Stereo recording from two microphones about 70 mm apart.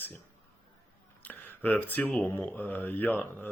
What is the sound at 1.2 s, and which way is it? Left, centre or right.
Speech, left.